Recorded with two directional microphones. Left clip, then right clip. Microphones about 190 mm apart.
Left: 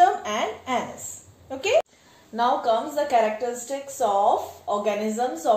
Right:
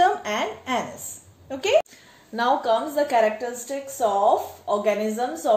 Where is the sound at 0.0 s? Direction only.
40° right (ahead or behind).